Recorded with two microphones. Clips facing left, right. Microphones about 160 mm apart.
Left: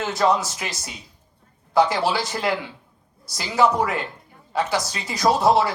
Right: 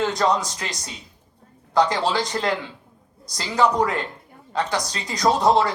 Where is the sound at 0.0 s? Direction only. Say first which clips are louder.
Even; 5° left (ahead or behind).